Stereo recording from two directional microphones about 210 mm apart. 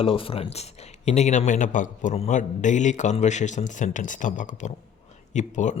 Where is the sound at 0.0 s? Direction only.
25° left (ahead or behind).